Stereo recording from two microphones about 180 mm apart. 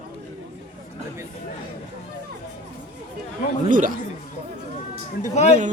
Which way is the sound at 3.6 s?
45° right (ahead or behind).